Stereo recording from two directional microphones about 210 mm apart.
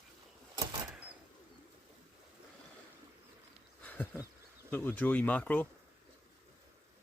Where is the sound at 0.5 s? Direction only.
15° right (ahead or behind).